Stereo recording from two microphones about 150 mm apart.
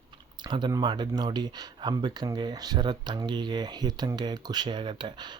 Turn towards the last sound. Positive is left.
turn(degrees=-30)  # may be behind; listen again after turning